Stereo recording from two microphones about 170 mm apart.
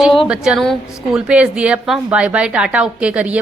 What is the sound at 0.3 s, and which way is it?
A woman's voice, 5° right (ahead or behind).